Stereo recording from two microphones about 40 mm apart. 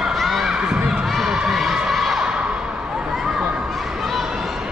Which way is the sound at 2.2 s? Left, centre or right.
Right.